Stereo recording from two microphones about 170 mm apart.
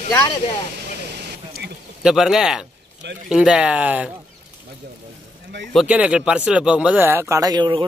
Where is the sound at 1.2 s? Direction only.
70° right (ahead or behind).